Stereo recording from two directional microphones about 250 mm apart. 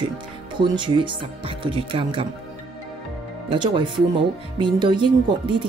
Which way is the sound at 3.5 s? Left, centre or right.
Centre.